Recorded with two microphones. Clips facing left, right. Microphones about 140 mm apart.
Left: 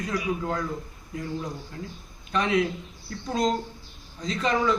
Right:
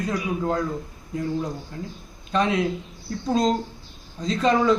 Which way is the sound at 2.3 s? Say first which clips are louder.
Right 2 dB; 25° right (ahead or behind).